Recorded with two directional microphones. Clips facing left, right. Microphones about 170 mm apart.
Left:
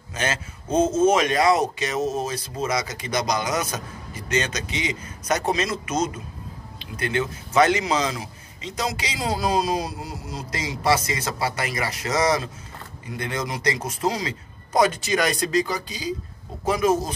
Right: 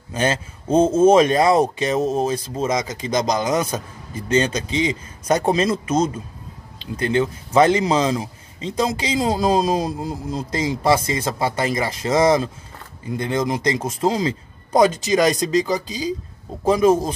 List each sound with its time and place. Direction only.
0.1 s speech: 30° right (ahead or behind)